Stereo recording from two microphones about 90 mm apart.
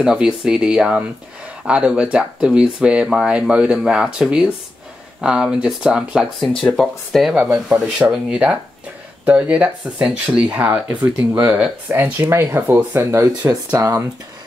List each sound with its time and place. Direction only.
0.0 s speech: 5° right (ahead or behind)
6.6 s speech: 5° left (ahead or behind); by 11.7 s 15° right (ahead or behind)
12.2 s speech: 30° right (ahead or behind)
13.0 s speech: 35° right (ahead or behind)